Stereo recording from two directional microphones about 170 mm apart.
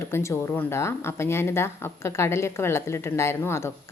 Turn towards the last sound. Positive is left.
turn(degrees=15)  # may be behind; listen again after turning